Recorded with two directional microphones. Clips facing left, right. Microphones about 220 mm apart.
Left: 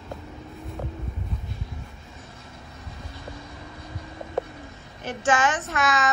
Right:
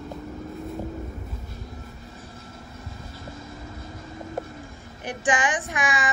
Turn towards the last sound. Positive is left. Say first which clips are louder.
# left 2 dB
turn(degrees=-15)  # may be behind; listen again after turning